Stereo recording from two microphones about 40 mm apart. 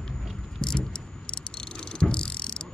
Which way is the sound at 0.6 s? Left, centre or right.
Centre.